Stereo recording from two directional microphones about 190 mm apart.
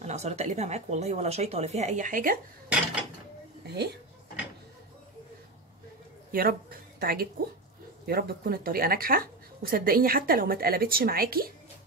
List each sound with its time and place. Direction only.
0.0 s speech: 35° right (ahead or behind)
3.6 s a woman's voice: 60° right (ahead or behind)
6.3 s speech: 45° right (ahead or behind)